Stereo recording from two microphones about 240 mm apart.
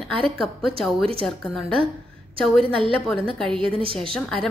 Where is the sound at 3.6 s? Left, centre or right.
Right.